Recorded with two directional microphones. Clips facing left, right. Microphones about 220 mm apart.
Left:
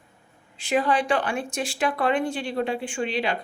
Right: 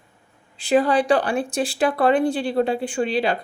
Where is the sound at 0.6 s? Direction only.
35° right (ahead or behind).